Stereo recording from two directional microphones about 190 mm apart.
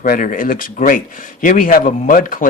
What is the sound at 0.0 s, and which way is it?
Speech, 45° left (ahead or behind).